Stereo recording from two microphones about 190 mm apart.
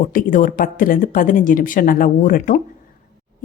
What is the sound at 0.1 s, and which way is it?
A woman's voice, 45° left (ahead or behind).